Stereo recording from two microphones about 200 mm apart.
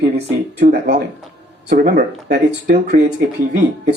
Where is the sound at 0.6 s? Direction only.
40° right (ahead or behind).